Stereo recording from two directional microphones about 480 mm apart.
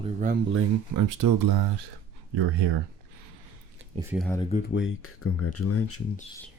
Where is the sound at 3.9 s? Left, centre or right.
Centre.